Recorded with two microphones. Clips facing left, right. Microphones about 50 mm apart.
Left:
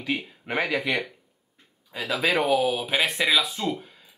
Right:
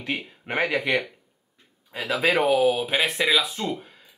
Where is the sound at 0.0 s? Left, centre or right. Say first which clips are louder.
Left 1 dB; centre.